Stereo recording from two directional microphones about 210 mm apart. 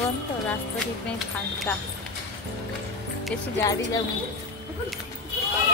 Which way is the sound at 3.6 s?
15° left (ahead or behind).